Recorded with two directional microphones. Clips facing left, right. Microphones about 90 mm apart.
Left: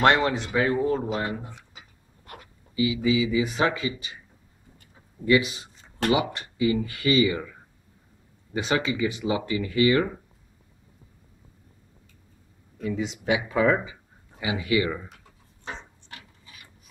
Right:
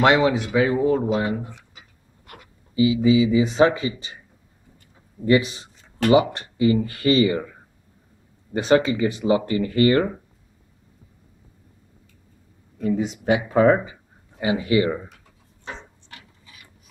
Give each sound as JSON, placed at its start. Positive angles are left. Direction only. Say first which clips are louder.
{"t": 0.0, "sound": "speech", "louder": "right 3 dB", "side_deg": -10}
{"t": 2.7, "sound": "speech", "louder": "right 6 dB", "side_deg": -25}
{"t": 5.2, "sound": "speech", "louder": "right 3 dB", "side_deg": -35}
{"t": 8.5, "sound": "speech", "louder": "right 7 dB", "side_deg": -40}
{"t": 12.8, "sound": "speech", "louder": "right 5 dB", "side_deg": -45}